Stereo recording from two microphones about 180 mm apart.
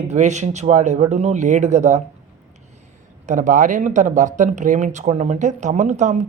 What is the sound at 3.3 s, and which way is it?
Speech, 45° right (ahead or behind).